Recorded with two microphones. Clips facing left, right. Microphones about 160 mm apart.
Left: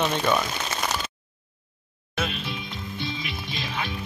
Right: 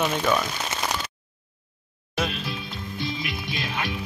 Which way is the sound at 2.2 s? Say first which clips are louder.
Right 2 dB; centre (ahead or behind).